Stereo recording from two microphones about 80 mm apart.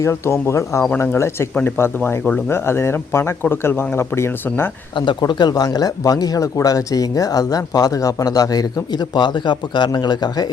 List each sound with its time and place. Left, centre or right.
0.0 s speech: left
5.2 s speech: left